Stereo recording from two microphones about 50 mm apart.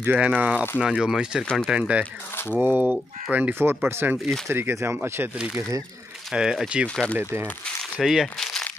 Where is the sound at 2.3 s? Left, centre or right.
Left.